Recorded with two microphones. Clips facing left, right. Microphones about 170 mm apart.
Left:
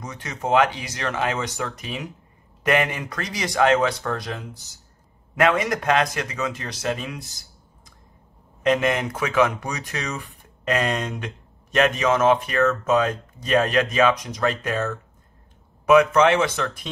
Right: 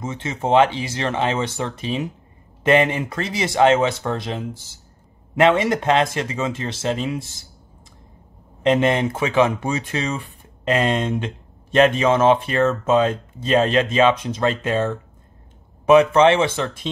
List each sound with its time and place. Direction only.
0.0 s speech: 25° right (ahead or behind)
8.6 s speech: 25° right (ahead or behind)